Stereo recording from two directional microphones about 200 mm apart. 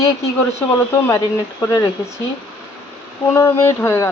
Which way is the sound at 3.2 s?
15° left (ahead or behind).